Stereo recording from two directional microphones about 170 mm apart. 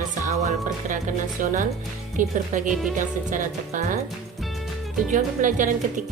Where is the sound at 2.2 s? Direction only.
50° right (ahead or behind).